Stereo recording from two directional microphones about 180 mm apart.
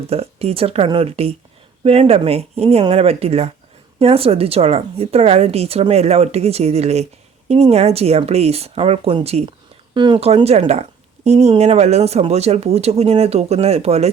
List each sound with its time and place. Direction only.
0.1 s speech: 35° right (ahead or behind)